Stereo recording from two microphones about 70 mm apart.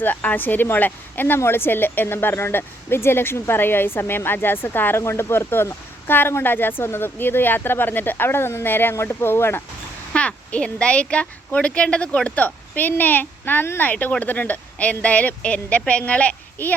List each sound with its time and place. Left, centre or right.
0.0 s a child's voice: left
10.1 s a woman's voice: centre